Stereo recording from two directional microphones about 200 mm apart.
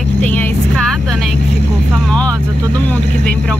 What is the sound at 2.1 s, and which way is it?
Speech, 5° left (ahead or behind).